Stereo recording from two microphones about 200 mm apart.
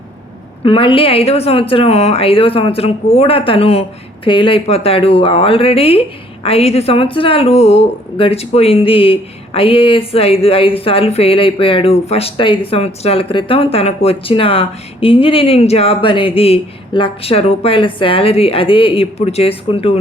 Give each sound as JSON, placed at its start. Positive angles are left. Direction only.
{"t": 0.6, "sound": "a woman's voice", "side_deg": 25}